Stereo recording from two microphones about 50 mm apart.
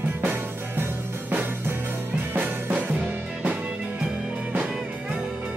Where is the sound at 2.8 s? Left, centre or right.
Right.